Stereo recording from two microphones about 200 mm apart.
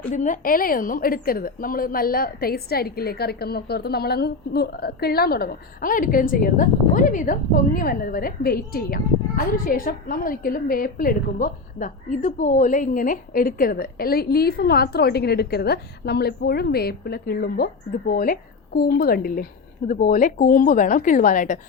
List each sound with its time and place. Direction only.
0.1 s a woman's voice: 40° left (ahead or behind)